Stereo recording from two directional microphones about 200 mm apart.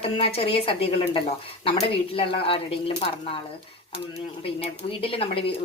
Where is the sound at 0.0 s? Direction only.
30° left (ahead or behind).